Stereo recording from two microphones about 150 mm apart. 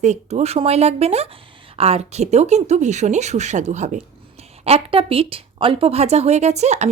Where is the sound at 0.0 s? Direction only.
50° right (ahead or behind).